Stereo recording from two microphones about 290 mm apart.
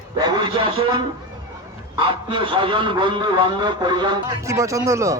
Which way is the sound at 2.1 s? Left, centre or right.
Centre.